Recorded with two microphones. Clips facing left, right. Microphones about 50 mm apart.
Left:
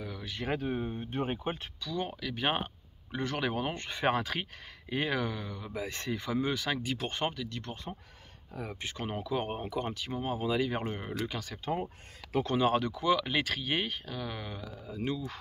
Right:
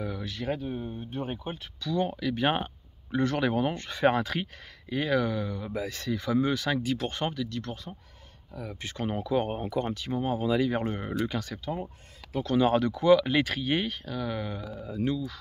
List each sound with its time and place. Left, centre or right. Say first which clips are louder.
0.4 s speech: right 2 dB; centre
0.7 s speech: left 1 dB; left
1.8 s speech: right 6 dB; centre
3.7 s speech: right 6 dB; centre
4.1 s speech: right 3 dB; centre
5.9 s speech: right 3 dB; left
6.2 s speech: right 5 dB; centre
8.8 s speech: right 6 dB; centre
11.6 s speech: even; left
12.5 s speech: right 6 dB; centre